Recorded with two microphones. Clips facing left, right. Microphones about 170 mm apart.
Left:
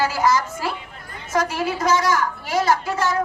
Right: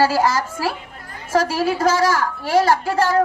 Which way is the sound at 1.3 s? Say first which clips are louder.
Right 4 dB; 35° right (ahead or behind).